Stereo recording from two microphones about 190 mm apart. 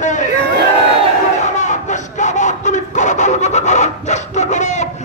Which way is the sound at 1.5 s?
40° left (ahead or behind).